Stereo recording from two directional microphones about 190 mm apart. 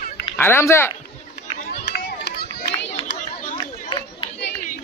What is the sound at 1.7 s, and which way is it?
Run, 55° left (ahead or behind).